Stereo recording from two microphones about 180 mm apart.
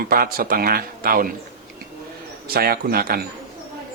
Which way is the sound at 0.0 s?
55° right (ahead or behind).